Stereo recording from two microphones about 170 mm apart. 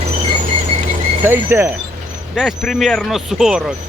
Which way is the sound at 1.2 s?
15° right (ahead or behind).